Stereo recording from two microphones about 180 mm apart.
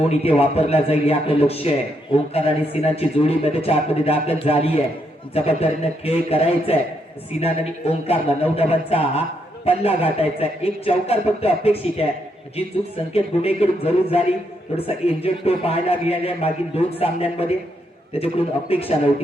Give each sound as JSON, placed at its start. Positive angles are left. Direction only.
{"t": 0.0, "sound": "a man's voice", "side_deg": 35}
{"t": 13.1, "sound": "a man's voice", "side_deg": 35}